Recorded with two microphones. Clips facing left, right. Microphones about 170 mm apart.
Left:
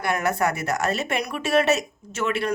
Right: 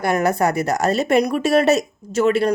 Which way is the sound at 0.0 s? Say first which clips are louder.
Right 5 dB; 40° right (ahead or behind).